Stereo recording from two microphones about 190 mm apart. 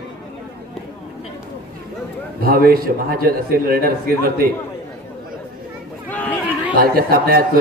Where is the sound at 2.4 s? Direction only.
50° right (ahead or behind).